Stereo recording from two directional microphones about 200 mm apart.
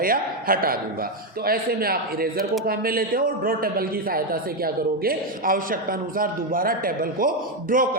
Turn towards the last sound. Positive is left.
turn(degrees=-45)  # may be behind; listen again after turning